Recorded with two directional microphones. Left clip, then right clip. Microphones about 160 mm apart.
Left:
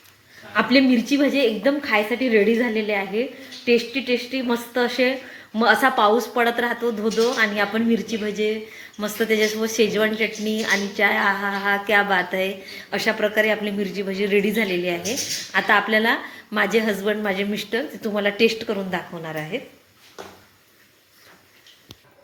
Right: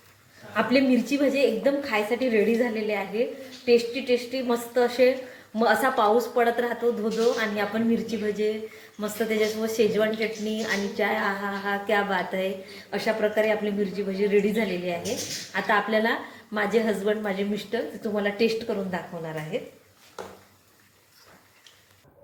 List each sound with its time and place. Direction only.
0.5 s a woman's voice: 55° left (ahead or behind)